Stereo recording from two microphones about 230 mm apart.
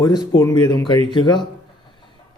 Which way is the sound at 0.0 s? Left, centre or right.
Centre.